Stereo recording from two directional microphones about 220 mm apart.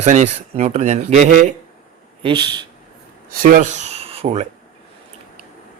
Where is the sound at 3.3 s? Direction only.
40° right (ahead or behind).